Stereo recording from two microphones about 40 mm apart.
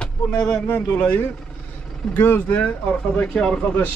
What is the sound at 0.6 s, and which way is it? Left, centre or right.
Speech, left.